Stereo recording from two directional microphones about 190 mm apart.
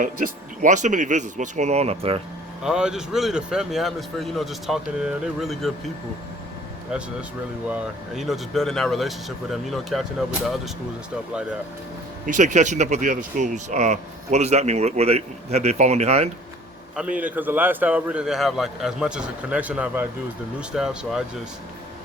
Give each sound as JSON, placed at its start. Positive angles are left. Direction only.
{"t": 0.0, "sound": "speech", "side_deg": -45}
{"t": 2.6, "sound": "a man's voice", "side_deg": -5}
{"t": 7.7, "sound": "a man's voice", "side_deg": 0}
{"t": 12.2, "sound": "speech", "side_deg": -40}
{"t": 16.9, "sound": "a man's voice", "side_deg": -5}